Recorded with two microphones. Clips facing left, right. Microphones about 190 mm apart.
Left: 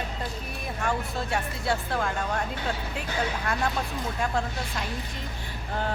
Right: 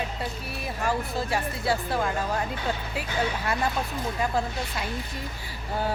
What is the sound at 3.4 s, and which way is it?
Speech, 5° right (ahead or behind).